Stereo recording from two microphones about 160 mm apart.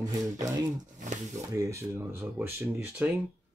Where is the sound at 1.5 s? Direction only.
20° right (ahead or behind).